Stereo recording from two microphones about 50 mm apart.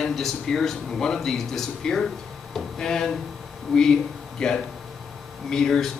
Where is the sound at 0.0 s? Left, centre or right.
Centre.